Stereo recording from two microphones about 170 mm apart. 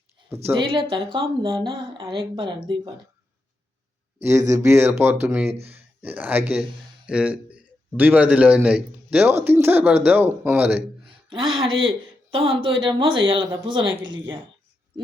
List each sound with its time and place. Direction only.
0.6 s speech: 30° right (ahead or behind)
4.3 s a man's voice: 15° right (ahead or behind)
11.3 s speech: 30° right (ahead or behind)
11.7 s a man's voice: 90° right
12.3 s speech: 30° right (ahead or behind)